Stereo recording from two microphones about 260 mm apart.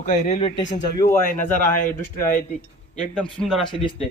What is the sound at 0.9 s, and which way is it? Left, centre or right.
Speech, centre.